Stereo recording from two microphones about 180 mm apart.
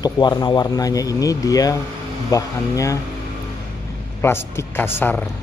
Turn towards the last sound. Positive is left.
turn(degrees=10)  # may be behind; listen again after turning